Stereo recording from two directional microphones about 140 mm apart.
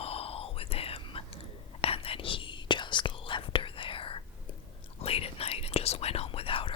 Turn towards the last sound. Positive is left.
turn(degrees=40)  # may be behind; listen again after turning